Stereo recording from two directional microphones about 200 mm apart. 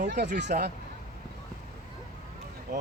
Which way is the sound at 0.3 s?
55° right (ahead or behind).